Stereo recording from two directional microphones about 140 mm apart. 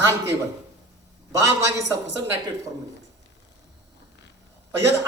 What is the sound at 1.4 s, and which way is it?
Speech, 20° right (ahead or behind).